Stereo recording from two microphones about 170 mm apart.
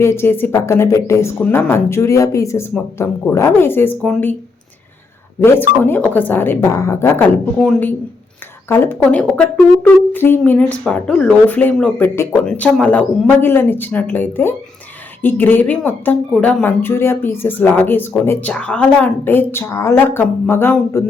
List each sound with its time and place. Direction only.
0.0 s speech: 15° left (ahead or behind)
5.4 s speech: 10° left (ahead or behind)